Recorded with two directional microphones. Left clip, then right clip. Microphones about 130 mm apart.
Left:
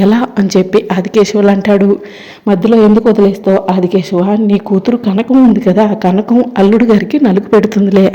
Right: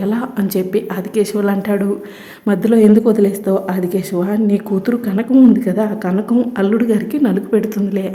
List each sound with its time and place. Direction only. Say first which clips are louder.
0.0 s speech: left 9 dB; 30° left (ahead or behind)
2.5 s speech: left 4 dB; 10° left (ahead or behind); by 8.1 s 35° left (ahead or behind)